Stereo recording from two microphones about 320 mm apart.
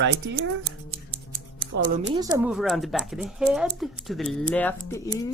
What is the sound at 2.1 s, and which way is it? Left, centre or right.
Speech, centre.